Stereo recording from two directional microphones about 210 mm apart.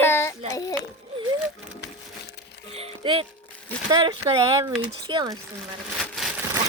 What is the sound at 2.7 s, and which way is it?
Speech, 25° right (ahead or behind).